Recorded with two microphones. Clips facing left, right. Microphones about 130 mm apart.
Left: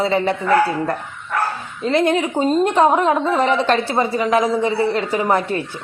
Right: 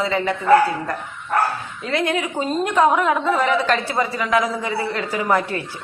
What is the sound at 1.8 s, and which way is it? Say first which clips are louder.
A woman's voice: left 5 dB; 25° left (ahead or behind).